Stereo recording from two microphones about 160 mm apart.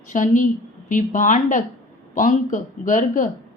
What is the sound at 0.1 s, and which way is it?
A woman's voice, 55° left (ahead or behind).